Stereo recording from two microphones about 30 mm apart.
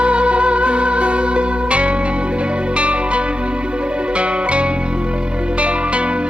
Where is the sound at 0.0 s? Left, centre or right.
Right.